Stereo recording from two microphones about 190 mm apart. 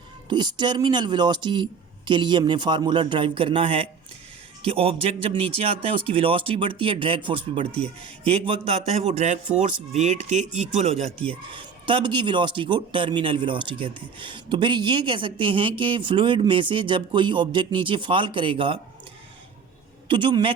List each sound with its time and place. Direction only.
0.3 s speech: 25° right (ahead or behind)
11.5 s speech: 25° right (ahead or behind)
20.1 s speech: 25° right (ahead or behind)